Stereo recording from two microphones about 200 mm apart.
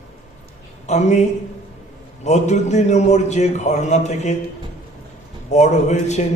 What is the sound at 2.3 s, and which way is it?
A man's voice, 35° left (ahead or behind).